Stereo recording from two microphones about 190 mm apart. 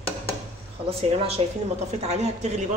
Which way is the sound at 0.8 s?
30° right (ahead or behind).